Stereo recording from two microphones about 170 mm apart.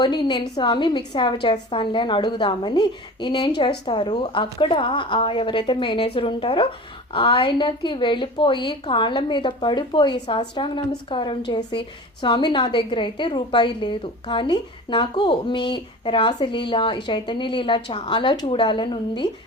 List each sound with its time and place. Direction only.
0.0 s a woman's voice: 25° left (ahead or behind)